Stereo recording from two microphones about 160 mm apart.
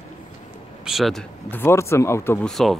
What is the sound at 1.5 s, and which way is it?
Speech, 15° left (ahead or behind).